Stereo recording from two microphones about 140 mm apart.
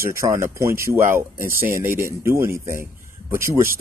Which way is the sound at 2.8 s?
20° right (ahead or behind).